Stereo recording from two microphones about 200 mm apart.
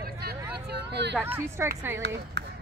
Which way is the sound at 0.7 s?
60° right (ahead or behind).